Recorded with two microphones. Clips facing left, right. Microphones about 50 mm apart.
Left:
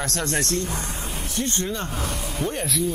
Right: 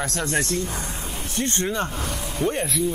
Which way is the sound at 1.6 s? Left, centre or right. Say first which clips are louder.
Right 3 dB; right.